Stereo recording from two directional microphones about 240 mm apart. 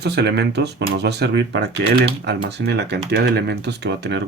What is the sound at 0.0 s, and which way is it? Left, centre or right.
Speech, right.